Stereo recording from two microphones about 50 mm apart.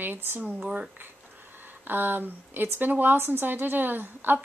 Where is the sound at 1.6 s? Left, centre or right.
Right.